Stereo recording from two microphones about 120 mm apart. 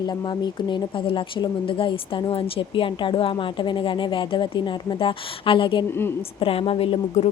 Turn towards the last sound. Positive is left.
turn(degrees=50)  # may be behind; listen again after turning